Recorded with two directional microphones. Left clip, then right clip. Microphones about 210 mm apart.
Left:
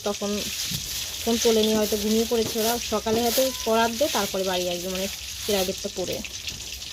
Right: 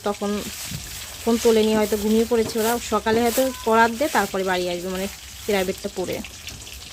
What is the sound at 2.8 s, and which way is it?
Speech, 20° right (ahead or behind).